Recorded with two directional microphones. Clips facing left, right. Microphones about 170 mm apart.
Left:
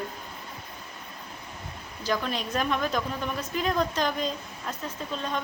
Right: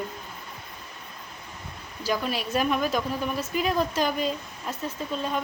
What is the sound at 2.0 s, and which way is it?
A woman's voice, 10° right (ahead or behind).